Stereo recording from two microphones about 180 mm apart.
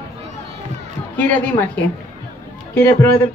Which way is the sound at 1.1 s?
10° left (ahead or behind).